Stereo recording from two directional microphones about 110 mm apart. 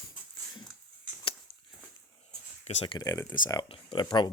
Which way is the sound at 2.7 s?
90° left.